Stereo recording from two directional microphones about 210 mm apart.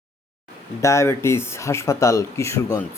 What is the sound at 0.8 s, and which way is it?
Speech, 15° left (ahead or behind).